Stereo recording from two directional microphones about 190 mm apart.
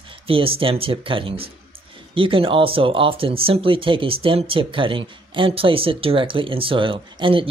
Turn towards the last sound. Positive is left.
turn(degrees=-25)  # may be behind; listen again after turning